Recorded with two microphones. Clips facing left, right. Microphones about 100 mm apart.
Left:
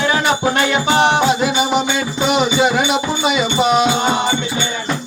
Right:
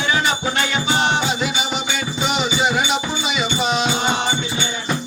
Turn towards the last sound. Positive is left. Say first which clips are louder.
# left 6 dB
turn(degrees=55)  # may be behind; listen again after turning